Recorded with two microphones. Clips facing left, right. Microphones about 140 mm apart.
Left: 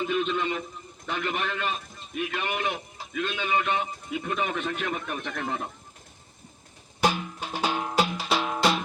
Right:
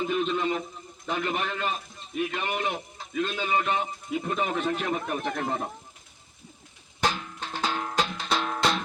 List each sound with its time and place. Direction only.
0.0 s a sound: 15° right (ahead or behind)
1.0 s a man's voice: 25° right (ahead or behind)
7.0 s music: 15° left (ahead or behind)